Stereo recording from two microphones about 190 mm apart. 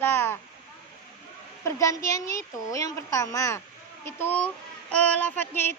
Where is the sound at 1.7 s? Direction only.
15° left (ahead or behind).